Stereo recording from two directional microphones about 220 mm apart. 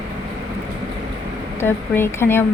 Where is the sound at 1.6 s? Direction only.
10° left (ahead or behind).